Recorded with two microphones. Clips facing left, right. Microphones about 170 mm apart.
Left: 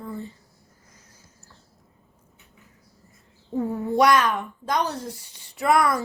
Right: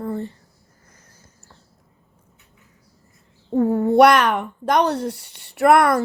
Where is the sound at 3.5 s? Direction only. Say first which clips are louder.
Right 8 dB; 65° right (ahead or behind).